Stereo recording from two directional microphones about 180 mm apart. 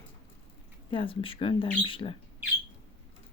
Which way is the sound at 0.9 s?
30° left (ahead or behind).